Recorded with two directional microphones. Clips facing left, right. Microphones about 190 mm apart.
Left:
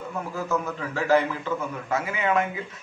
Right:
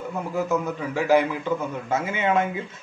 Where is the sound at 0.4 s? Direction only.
20° right (ahead or behind).